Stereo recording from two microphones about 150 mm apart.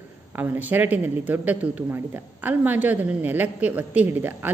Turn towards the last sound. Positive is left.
turn(degrees=-10)  # may be behind; listen again after turning